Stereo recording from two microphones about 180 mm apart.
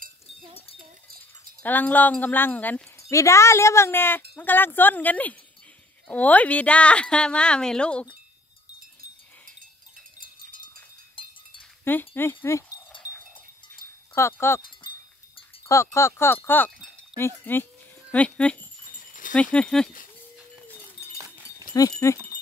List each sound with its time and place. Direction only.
1.6 s speech: 10° left (ahead or behind)
10.2 s a sound: 25° left (ahead or behind)
11.2 s cowbell: 30° left (ahead or behind)
11.8 s speech: 10° left (ahead or behind)
14.1 s speech: 15° left (ahead or behind)
15.6 s speech: 15° left (ahead or behind)
22.0 s speech: 15° left (ahead or behind)